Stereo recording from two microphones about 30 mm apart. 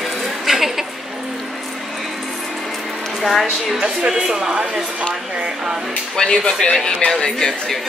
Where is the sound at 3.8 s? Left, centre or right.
Right.